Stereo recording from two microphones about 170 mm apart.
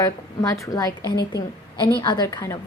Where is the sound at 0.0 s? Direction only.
20° left (ahead or behind).